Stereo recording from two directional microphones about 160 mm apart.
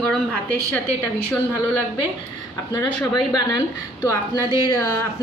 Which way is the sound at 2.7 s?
25° left (ahead or behind).